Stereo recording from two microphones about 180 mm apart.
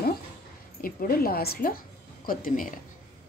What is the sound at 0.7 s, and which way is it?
A woman's voice, 55° left (ahead or behind).